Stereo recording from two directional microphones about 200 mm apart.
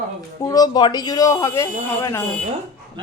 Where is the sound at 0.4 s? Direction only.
20° left (ahead or behind).